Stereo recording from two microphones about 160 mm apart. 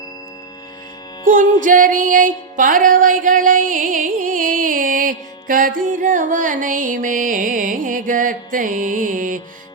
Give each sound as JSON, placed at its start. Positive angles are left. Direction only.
{"t": 1.2, "sound": "music", "side_deg": -55}